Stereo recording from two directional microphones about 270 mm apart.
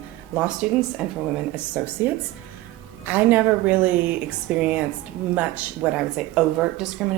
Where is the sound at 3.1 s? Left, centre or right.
Centre.